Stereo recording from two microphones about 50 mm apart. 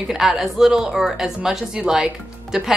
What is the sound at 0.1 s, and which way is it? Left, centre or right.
A woman's voice, centre.